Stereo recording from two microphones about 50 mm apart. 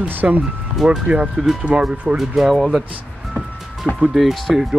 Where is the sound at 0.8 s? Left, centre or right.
Right; by 2.8 s centre.